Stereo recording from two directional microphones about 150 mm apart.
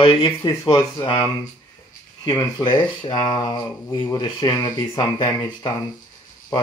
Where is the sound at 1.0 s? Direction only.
35° left (ahead or behind).